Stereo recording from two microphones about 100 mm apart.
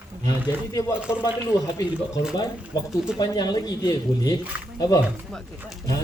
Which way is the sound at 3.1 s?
40° left (ahead or behind).